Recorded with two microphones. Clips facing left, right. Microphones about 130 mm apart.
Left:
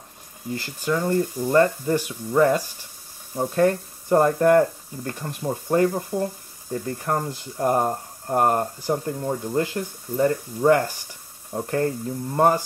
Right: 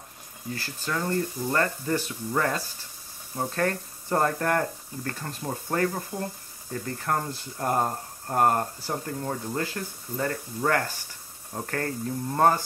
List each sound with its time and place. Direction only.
0.6 s speech: 15° left (ahead or behind)